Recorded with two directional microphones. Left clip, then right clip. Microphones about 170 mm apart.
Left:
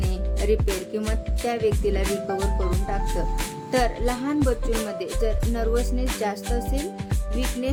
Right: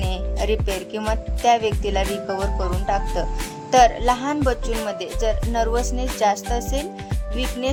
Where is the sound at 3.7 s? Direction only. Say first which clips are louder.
Right 9 dB; 20° left (ahead or behind).